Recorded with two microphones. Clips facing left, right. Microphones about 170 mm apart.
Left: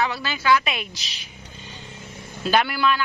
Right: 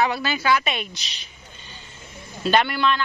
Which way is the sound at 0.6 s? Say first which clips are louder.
Right 2 dB; centre (ahead or behind).